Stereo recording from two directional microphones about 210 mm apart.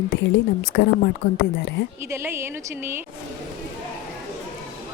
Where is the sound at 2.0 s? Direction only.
15° right (ahead or behind).